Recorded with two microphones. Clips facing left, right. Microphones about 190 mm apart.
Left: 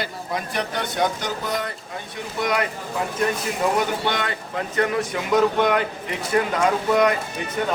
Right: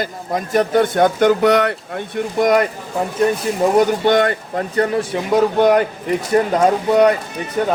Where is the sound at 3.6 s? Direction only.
30° right (ahead or behind).